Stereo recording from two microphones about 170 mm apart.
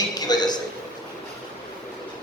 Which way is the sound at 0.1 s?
25° left (ahead or behind).